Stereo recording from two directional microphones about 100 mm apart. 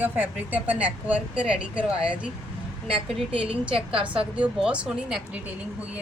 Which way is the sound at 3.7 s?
65° right (ahead or behind).